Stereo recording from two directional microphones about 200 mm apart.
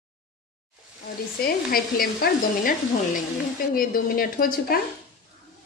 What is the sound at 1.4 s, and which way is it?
A woman's voice, 50° left (ahead or behind).